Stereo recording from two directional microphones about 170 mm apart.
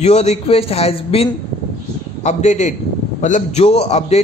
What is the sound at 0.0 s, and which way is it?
A man's voice, 40° left (ahead or behind).